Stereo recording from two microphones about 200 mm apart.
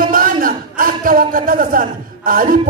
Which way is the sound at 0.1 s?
45° right (ahead or behind).